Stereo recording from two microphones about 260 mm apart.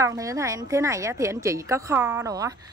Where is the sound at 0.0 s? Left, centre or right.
Centre.